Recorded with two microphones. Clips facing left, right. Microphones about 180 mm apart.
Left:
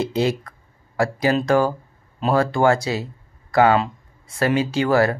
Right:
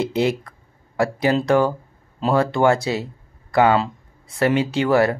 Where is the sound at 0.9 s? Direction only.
20° right (ahead or behind).